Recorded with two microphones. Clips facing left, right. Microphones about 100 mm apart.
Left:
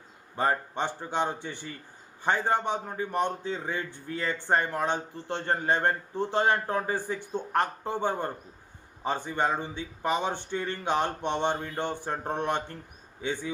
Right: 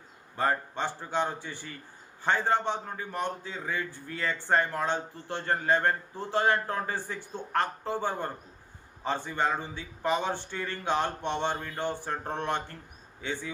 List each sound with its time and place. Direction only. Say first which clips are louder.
0.3 s a man's voice: left 1 dB; 20° left (ahead or behind)